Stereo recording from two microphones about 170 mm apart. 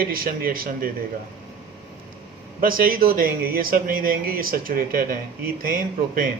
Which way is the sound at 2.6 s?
55° right (ahead or behind).